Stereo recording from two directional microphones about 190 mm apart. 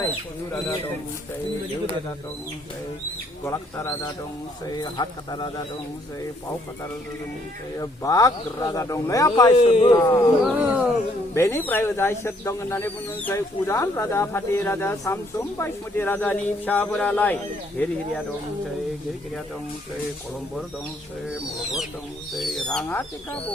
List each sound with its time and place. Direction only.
3.4 s speech: 15° left (ahead or behind)
7.8 s speech: 20° left (ahead or behind)
9.6 s speech: 35° left (ahead or behind)
9.9 s speech: 15° left (ahead or behind)
10.4 s speech: 5° right (ahead or behind)
11.3 s speech: 15° left (ahead or behind)
21.2 s owl: centre (ahead or behind)